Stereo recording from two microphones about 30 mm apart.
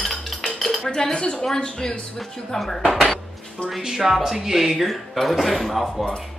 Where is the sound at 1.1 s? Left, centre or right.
Left.